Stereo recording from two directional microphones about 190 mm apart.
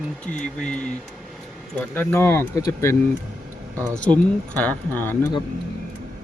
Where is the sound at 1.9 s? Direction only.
10° left (ahead or behind).